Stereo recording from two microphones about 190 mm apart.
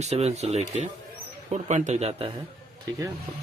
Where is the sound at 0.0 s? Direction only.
35° right (ahead or behind).